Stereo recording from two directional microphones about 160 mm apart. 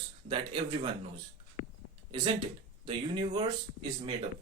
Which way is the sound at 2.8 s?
35° right (ahead or behind).